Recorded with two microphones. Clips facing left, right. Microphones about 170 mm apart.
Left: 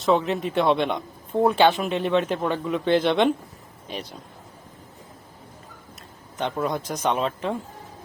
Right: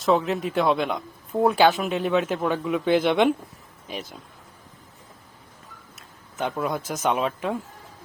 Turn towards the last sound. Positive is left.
turn(degrees=-5)  # may be behind; listen again after turning